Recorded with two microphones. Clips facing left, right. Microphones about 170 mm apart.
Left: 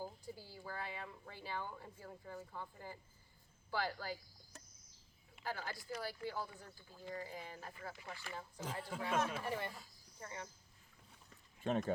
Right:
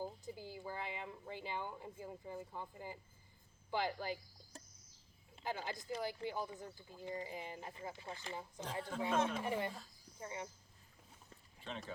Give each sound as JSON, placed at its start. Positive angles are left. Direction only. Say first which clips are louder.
{"t": 0.0, "sound": "speech", "louder": "right 3 dB", "side_deg": -20}
{"t": 5.4, "sound": "speech", "louder": "right 2 dB", "side_deg": -20}
{"t": 11.6, "sound": "speech", "louder": "left 11 dB", "side_deg": 50}